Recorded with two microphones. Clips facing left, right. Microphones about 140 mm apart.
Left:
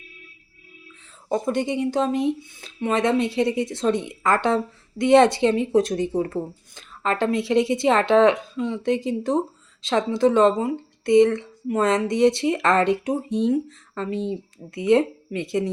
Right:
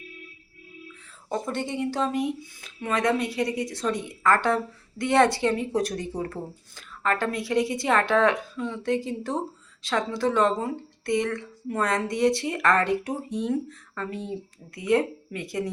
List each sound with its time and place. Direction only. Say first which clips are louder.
1.3 s speech: left 6 dB; 20° left (ahead or behind)